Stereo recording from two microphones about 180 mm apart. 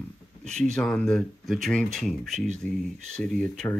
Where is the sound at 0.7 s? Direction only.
5° left (ahead or behind).